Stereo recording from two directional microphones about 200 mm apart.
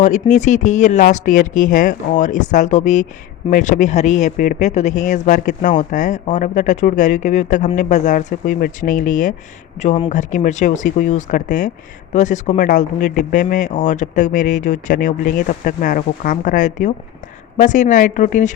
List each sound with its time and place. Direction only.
0.0 s speech: 40° left (ahead or behind)